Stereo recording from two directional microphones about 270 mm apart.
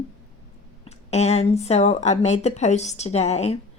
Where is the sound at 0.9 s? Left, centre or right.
Left.